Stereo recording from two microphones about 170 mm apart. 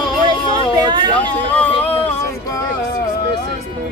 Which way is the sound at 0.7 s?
25° right (ahead or behind).